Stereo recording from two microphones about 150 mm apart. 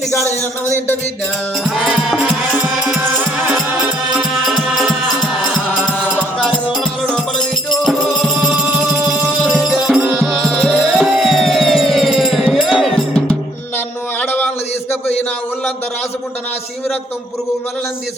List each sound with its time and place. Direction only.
0.1 s speech: 20° left (ahead or behind)
1.6 s music: centre (ahead or behind)
8.4 s music: 10° right (ahead or behind)
9.4 s music: centre (ahead or behind)
13.7 s a sound: 15° left (ahead or behind)